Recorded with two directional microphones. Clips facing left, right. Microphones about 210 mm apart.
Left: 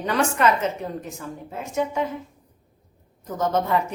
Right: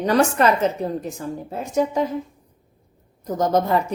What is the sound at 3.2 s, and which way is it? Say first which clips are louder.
Speech: right 4 dB; 35° right (ahead or behind).